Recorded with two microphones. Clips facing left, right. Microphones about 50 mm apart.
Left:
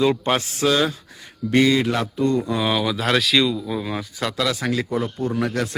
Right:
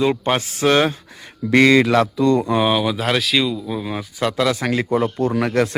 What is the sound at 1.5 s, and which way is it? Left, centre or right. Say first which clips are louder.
Speech: right 4 dB; right.